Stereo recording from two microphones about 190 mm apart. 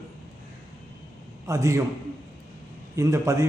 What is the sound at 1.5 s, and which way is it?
Speech, 15° right (ahead or behind).